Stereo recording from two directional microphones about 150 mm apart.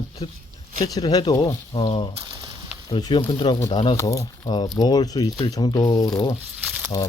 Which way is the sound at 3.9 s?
20° left (ahead or behind).